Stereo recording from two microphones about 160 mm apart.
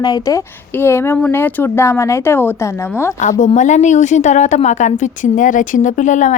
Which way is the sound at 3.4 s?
50° left (ahead or behind).